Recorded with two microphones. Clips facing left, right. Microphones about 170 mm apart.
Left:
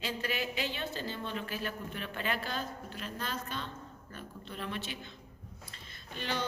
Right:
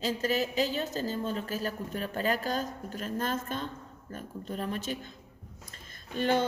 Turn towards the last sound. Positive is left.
turn(degrees=-50)  # may be behind; listen again after turning